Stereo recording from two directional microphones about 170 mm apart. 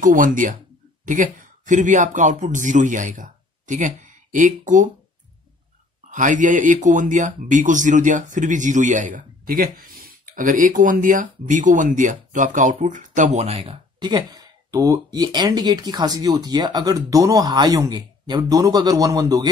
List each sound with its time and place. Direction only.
0.0 s speech: 50° right (ahead or behind)
6.0 s speech: 50° right (ahead or behind)
13.6 s speech: 25° right (ahead or behind)